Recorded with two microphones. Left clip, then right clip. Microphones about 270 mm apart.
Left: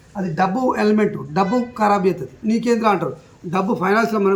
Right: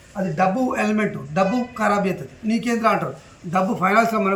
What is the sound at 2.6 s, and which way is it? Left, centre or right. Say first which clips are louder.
A man's voice: left 2 dB; centre.